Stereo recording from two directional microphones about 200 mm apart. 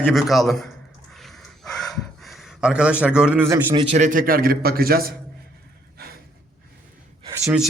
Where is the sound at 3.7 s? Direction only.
30° right (ahead or behind); by 5.1 s 50° right (ahead or behind).